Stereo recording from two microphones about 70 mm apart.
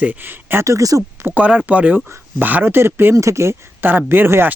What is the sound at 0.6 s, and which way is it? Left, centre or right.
Speech, right.